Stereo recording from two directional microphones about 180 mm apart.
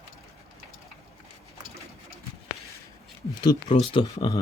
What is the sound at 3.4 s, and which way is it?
Speech, 25° left (ahead or behind).